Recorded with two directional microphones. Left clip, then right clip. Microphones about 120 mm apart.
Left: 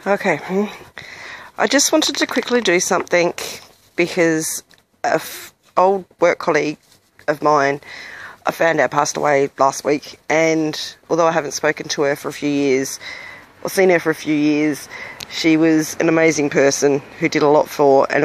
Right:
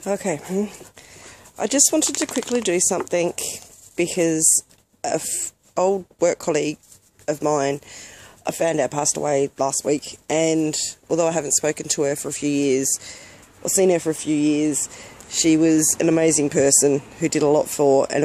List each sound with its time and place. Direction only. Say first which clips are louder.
0.0 s speech: left 7 dB; centre (ahead or behind)
0.9 s a sound: left 11 dB; 5° left (ahead or behind)
2.5 s speech: left 5 dB; centre (ahead or behind); by 6.8 s 15° right (ahead or behind)
7.9 s speech: left 9 dB; 15° right (ahead or behind)